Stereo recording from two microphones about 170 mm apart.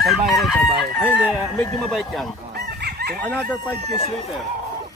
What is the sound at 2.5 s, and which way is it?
Chicken, 70° right (ahead or behind).